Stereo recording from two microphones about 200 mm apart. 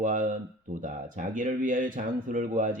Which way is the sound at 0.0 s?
40° right (ahead or behind).